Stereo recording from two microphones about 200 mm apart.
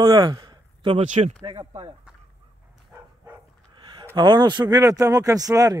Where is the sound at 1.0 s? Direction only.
35° right (ahead or behind).